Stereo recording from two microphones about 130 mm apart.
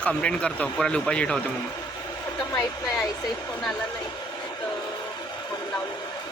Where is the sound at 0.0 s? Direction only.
10° left (ahead or behind).